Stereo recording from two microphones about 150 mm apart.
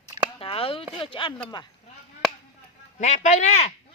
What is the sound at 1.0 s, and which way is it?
Speech, 35° left (ahead or behind).